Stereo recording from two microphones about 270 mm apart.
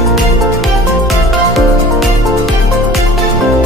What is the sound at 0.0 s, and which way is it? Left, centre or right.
Music, centre.